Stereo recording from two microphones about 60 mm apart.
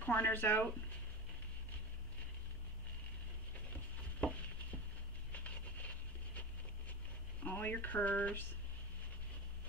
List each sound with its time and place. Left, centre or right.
0.0 s speech: left
5.3 s dog: left
7.4 s speech: left